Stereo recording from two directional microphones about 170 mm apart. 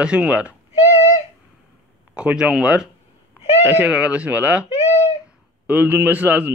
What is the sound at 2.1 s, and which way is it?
Speech, 5° right (ahead or behind).